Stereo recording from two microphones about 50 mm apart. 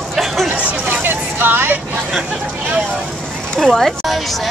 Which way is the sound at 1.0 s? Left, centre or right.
Right.